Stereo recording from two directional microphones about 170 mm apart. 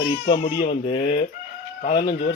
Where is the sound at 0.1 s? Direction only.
30° left (ahead or behind).